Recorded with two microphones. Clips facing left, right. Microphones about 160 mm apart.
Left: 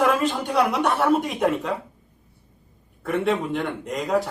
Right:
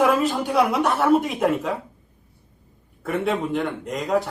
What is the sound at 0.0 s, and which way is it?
A man's voice, centre (ahead or behind).